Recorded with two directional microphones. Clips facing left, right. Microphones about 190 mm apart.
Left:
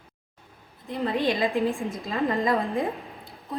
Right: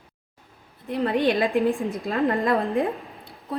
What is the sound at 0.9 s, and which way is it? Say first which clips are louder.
A woman's voice: right 3 dB; 60° right (ahead or behind).